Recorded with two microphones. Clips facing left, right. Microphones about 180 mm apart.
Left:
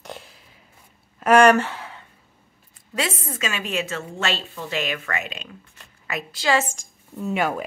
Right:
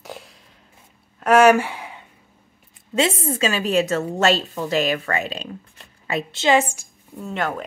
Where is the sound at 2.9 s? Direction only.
25° right (ahead or behind).